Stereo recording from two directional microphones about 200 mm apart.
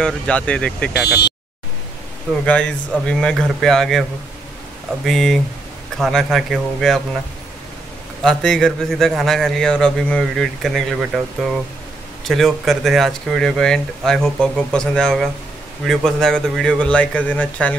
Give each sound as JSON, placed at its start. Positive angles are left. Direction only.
{"t": 0.0, "sound": "a man's voice", "side_deg": 5}
{"t": 1.0, "sound": "speech", "side_deg": 55}
{"t": 2.4, "sound": "a man's voice", "side_deg": 5}
{"t": 5.0, "sound": "a man's voice", "side_deg": 0}
{"t": 8.2, "sound": "a man's voice", "side_deg": 0}
{"t": 12.3, "sound": "a man's voice", "side_deg": 0}